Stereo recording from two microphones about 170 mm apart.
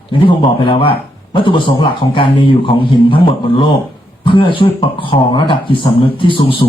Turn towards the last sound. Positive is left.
turn(degrees=30)  # may be behind; listen again after turning